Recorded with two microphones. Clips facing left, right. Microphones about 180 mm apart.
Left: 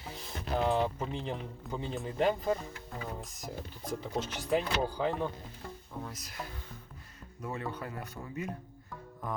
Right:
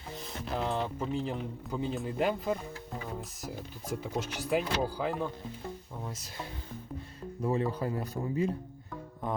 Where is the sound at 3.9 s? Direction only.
10° right (ahead or behind).